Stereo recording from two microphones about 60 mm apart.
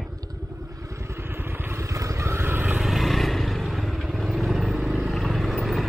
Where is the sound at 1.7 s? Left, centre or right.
Right.